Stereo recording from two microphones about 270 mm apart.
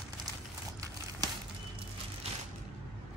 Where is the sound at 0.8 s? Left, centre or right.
Centre.